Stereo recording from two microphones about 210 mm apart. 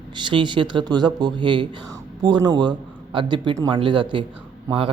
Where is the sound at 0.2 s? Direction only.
20° right (ahead or behind).